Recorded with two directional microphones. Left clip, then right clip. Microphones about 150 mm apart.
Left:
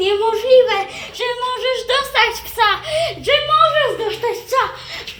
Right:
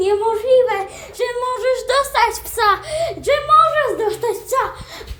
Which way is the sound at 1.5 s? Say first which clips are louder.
Right 4 dB; 30° right (ahead or behind).